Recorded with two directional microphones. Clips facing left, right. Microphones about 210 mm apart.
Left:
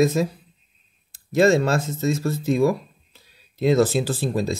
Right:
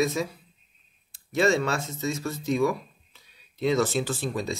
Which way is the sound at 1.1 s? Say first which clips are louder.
Left 6 dB; 40° left (ahead or behind).